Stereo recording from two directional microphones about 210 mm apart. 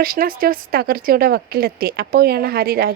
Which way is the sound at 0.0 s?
45° right (ahead or behind).